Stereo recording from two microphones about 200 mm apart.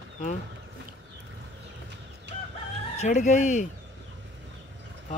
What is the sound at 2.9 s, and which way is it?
Speech, 35° left (ahead or behind).